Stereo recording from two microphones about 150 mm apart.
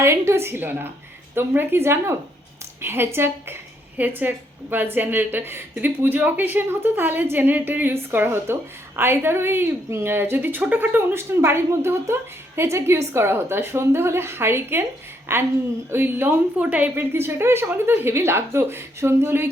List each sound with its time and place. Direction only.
0.0 s a woman's voice: 15° right (ahead or behind)